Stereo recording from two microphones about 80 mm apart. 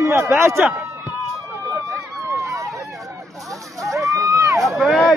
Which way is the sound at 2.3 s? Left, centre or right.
Right.